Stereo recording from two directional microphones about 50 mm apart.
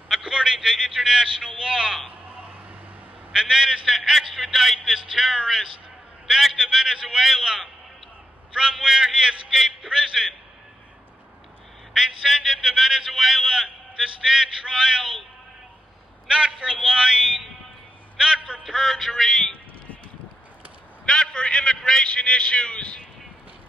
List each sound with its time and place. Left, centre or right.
0.1 s a sound: centre
0.6 s a man's voice: centre
2.2 s a sound: right
3.3 s a man's voice: centre
11.9 s a man's voice: centre
16.3 s a man's voice: centre
18.6 s a man's voice: centre
18.9 s a sound: centre
21.0 s a man's voice: centre